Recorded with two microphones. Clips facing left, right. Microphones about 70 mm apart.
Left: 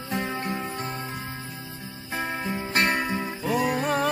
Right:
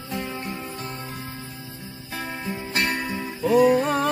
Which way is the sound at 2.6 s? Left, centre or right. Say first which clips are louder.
Left 2 dB; left.